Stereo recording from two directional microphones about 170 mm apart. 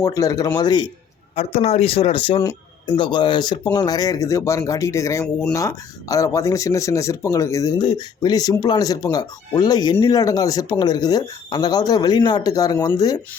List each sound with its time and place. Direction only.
0.0 s speech: 20° left (ahead or behind)
1.4 s speech: 40° left (ahead or behind); by 13.1 s 20° left (ahead or behind)